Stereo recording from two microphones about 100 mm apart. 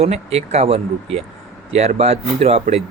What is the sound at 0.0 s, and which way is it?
Speech, 90° right.